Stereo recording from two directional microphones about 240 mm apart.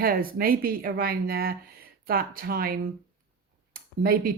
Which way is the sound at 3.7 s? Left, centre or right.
Right.